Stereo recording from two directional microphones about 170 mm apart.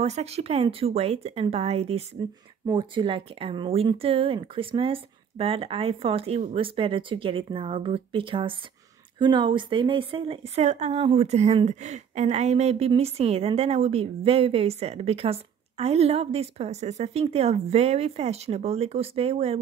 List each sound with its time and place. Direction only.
0.0 s speech: 40° right (ahead or behind)